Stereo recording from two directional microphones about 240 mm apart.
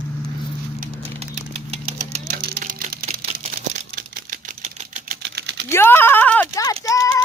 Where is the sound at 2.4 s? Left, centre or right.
Right.